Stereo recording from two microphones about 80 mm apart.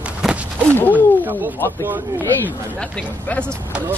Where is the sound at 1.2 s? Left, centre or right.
Right.